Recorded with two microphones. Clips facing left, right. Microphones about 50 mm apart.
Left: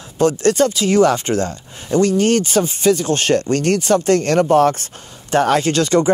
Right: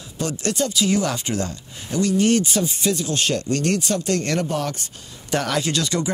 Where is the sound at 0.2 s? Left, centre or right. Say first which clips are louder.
Left 10 dB; left.